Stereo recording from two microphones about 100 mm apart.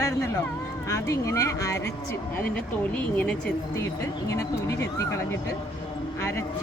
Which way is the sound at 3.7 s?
30° left (ahead or behind).